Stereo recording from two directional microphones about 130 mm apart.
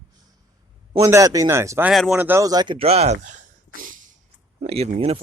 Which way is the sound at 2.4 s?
30° right (ahead or behind).